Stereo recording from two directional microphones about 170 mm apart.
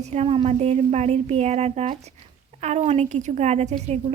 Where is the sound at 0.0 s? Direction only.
40° right (ahead or behind).